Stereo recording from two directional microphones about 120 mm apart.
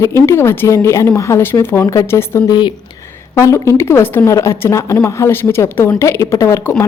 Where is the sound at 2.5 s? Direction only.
40° left (ahead or behind).